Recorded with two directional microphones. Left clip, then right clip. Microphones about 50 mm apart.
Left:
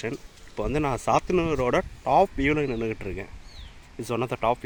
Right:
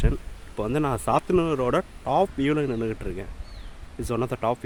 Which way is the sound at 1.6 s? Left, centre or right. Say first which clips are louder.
Even; left.